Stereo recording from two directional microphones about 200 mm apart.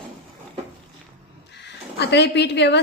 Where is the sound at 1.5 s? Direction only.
55° left (ahead or behind).